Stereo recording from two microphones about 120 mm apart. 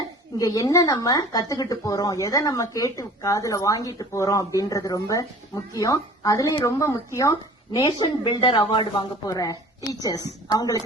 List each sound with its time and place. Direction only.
0.3 s speech: 30° left (ahead or behind)